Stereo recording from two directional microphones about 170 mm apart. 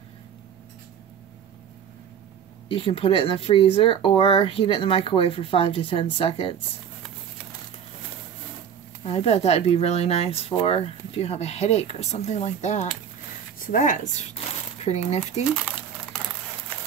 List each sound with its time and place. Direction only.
2.7 s speech: 30° left (ahead or behind)
9.0 s speech: 35° left (ahead or behind)